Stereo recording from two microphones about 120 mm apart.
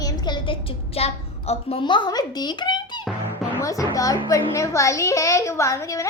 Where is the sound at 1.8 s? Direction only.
40° left (ahead or behind).